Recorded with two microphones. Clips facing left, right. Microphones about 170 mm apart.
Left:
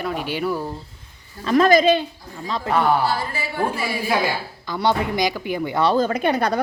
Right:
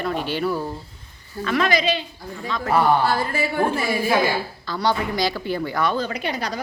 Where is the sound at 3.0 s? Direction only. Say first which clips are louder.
Right 2 dB; 50° right (ahead or behind).